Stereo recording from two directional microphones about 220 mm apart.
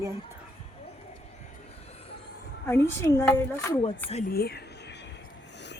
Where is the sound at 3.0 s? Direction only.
10° left (ahead or behind).